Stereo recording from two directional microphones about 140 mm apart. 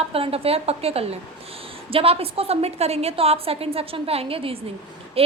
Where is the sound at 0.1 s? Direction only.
45° right (ahead or behind).